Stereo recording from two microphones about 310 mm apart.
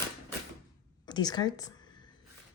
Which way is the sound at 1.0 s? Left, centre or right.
Centre.